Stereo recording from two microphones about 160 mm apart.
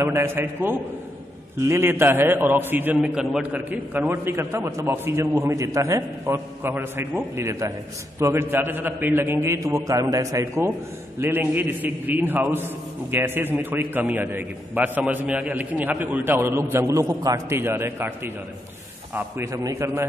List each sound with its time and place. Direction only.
0.0 s a man's voice: 15° right (ahead or behind)